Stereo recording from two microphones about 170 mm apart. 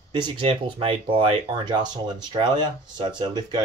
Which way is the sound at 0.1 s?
25° right (ahead or behind).